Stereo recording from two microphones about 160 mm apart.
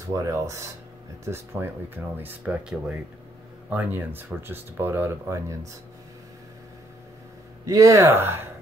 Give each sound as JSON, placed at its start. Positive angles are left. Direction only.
{"t": 0.1, "sound": "speech", "side_deg": -20}
{"t": 7.6, "sound": "speech", "side_deg": -20}